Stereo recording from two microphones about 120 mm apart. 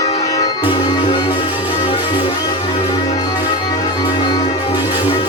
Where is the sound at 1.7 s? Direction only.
65° left (ahead or behind).